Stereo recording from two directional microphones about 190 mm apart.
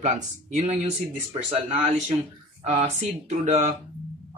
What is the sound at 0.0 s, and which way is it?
Speech, 40° right (ahead or behind).